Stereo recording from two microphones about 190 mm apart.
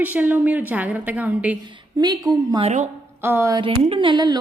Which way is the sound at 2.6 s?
35° right (ahead or behind).